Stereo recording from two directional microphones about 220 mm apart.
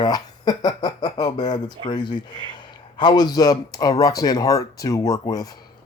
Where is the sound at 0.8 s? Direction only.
20° left (ahead or behind).